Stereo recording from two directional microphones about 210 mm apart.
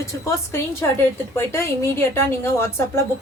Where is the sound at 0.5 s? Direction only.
10° left (ahead or behind).